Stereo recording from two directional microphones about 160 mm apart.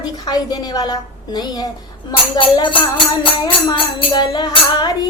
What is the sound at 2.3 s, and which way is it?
Music, 30° left (ahead or behind).